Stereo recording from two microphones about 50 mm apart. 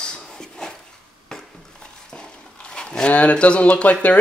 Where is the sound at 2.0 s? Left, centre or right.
Centre.